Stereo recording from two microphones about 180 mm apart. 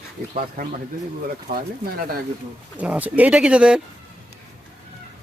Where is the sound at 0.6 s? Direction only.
55° right (ahead or behind).